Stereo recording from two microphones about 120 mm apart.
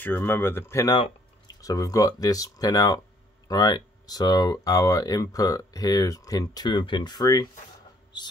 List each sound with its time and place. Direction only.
0.0 s speech: 20° left (ahead or behind); by 8.3 s 40° left (ahead or behind)